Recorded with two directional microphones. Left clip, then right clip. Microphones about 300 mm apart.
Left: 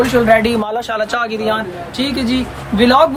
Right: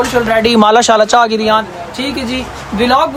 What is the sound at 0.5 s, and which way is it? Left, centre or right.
Speech, right.